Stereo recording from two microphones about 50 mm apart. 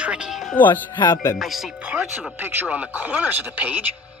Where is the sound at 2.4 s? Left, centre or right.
Right.